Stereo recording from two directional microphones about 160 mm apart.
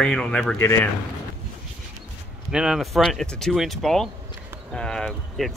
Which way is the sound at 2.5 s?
5° right (ahead or behind).